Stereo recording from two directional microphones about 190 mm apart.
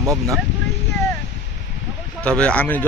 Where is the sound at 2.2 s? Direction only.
5° left (ahead or behind).